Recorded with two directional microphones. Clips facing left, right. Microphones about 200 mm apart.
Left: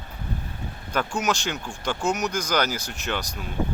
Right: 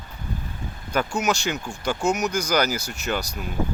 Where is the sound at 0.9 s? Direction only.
5° right (ahead or behind).